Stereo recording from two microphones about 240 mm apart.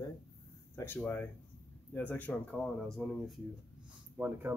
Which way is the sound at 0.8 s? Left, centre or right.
Centre.